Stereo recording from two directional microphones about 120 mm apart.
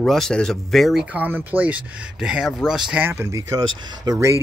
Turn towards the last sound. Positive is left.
turn(degrees=-25)  # may be behind; listen again after turning